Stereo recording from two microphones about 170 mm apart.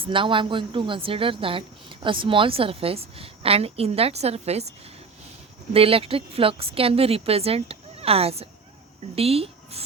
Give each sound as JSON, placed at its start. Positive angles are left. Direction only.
{"t": 0.0, "sound": "a woman's voice", "side_deg": -30}
{"t": 5.7, "sound": "a woman's voice", "side_deg": -35}